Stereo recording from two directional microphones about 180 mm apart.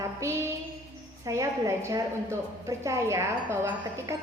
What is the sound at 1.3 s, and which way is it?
A woman's voice, 15° right (ahead or behind).